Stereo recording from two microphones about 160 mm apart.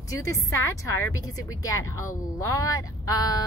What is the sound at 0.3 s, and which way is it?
A woman's voice, 20° left (ahead or behind).